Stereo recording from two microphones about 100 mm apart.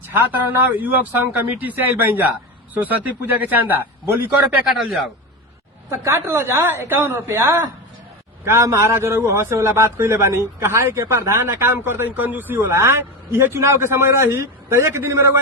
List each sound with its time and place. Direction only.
0.1 s speech: 20° right (ahead or behind)
5.9 s a man's voice: 25° right (ahead or behind)